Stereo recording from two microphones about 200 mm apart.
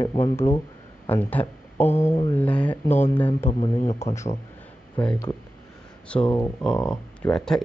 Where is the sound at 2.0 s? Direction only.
30° left (ahead or behind).